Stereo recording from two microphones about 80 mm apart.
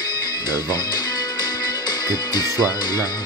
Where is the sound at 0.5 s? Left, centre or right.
Left.